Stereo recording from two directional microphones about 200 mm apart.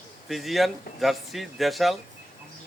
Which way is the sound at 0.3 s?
Centre (ahead or behind).